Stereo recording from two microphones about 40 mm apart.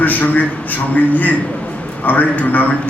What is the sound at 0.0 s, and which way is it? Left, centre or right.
A man's voice, left.